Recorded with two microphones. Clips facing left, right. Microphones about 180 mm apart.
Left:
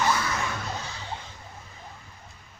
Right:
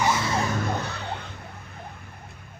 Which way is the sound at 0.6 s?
60° right (ahead or behind).